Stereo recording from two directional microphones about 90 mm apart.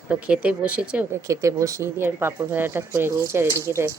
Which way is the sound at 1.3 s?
35° right (ahead or behind).